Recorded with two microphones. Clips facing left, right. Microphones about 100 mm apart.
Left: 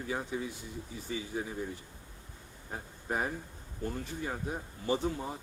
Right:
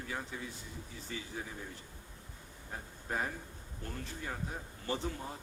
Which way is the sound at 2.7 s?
15° left (ahead or behind).